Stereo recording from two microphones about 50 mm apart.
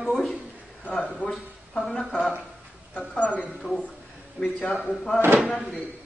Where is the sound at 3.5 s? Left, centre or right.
Centre.